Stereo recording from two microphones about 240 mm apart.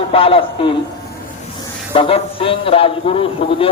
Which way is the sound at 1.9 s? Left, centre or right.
Left.